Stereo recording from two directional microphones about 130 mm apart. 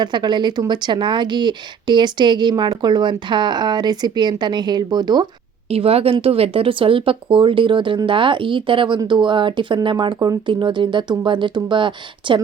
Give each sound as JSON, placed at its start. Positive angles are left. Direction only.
{"t": 0.0, "sound": "speech", "side_deg": -35}
{"t": 5.6, "sound": "speech", "side_deg": -50}